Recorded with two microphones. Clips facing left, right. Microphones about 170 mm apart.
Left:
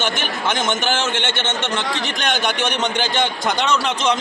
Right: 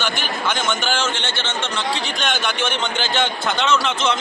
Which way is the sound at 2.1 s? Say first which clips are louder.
Left 2 dB; 15° left (ahead or behind).